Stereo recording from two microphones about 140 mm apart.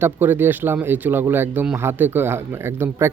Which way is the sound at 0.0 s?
15° right (ahead or behind).